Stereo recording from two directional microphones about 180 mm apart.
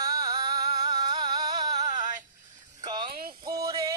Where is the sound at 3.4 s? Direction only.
20° right (ahead or behind).